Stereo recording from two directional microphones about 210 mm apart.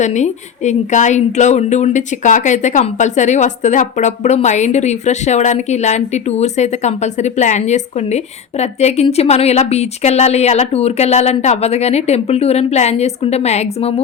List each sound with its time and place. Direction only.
0.0 s a woman's voice: 35° left (ahead or behind)